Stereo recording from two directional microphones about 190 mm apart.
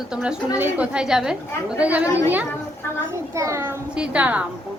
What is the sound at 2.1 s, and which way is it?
Speech, 15° left (ahead or behind).